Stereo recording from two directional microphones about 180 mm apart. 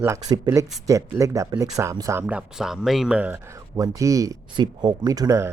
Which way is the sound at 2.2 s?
5° right (ahead or behind).